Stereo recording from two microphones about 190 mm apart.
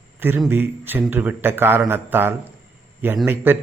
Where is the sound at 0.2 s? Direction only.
10° right (ahead or behind).